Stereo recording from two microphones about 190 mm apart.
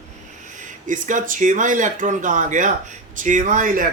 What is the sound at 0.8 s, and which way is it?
Speech, 40° right (ahead or behind).